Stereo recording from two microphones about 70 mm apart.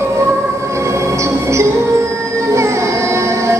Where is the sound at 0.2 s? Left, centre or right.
Right.